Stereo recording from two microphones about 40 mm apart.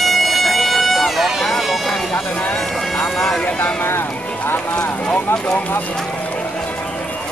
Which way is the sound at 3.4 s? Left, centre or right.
Left.